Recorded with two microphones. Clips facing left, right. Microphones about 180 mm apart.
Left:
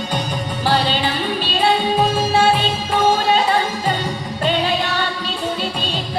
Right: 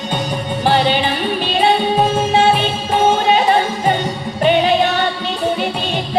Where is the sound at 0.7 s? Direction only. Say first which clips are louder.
Right 4 dB; 20° right (ahead or behind).